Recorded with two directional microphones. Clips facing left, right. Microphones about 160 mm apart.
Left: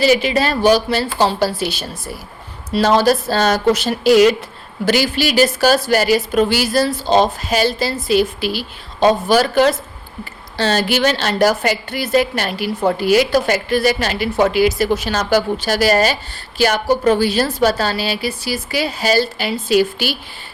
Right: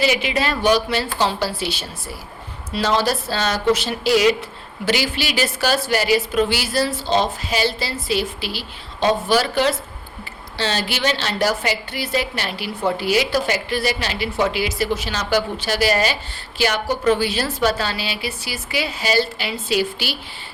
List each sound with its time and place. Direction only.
0.0 s a woman's voice: 40° left (ahead or behind)